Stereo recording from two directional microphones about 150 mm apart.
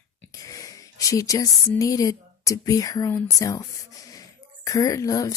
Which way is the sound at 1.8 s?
25° left (ahead or behind).